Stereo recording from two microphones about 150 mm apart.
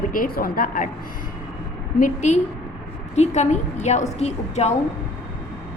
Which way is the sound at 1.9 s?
55° left (ahead or behind).